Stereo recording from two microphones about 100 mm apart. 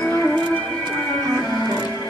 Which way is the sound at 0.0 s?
30° left (ahead or behind).